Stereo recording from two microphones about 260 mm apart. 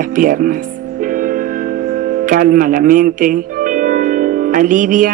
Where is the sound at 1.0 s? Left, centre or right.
Right.